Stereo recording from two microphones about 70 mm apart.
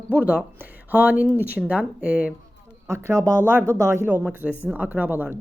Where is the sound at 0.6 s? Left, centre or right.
Right.